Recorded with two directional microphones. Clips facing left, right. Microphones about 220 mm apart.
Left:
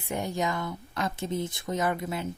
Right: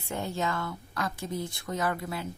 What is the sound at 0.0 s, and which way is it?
Speech, 15° left (ahead or behind).